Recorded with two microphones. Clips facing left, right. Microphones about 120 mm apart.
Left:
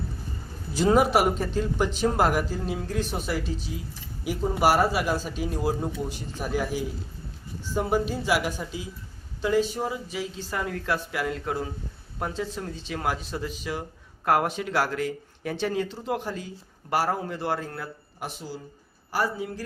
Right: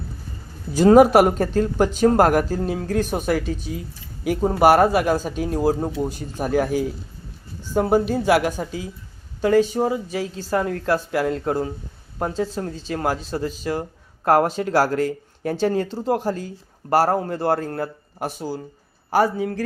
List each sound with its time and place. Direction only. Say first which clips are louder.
0.7 s speech: right 8 dB; 45° right (ahead or behind)
19.1 s a man's voice: right 8 dB; 60° right (ahead or behind)